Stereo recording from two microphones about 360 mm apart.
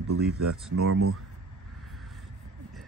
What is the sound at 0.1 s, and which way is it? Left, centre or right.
Speech, right.